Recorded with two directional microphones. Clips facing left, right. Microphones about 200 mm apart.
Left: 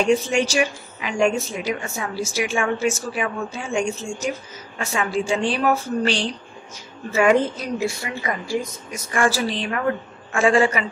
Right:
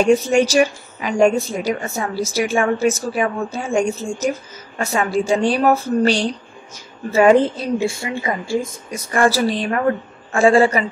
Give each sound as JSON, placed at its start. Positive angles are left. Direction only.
{"t": 0.0, "sound": "a woman's voice", "side_deg": -45}